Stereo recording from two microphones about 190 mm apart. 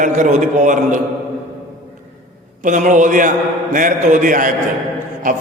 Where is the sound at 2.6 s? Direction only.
40° right (ahead or behind).